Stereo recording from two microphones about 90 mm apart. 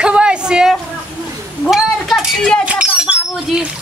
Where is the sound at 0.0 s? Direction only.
10° right (ahead or behind).